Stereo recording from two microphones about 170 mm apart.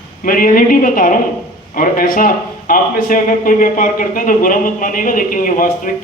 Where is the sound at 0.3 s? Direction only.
55° left (ahead or behind).